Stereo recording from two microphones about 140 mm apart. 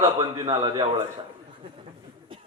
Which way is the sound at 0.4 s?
40° right (ahead or behind).